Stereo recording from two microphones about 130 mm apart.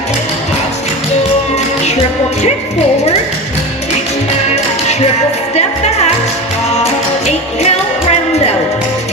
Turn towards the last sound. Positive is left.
turn(degrees=55)  # may be behind; listen again after turning